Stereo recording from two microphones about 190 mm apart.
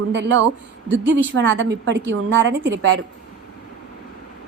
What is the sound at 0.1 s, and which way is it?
A woman's voice, 70° right (ahead or behind).